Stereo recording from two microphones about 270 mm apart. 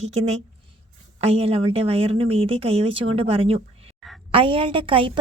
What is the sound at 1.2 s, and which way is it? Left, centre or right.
A woman's voice, right.